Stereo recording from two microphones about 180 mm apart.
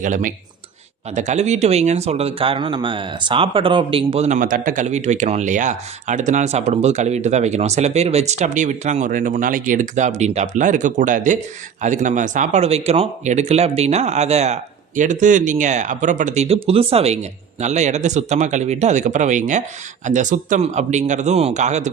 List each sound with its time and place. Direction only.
0.0 s speech: 45° right (ahead or behind)